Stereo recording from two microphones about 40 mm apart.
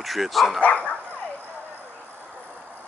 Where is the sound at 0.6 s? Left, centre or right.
Left.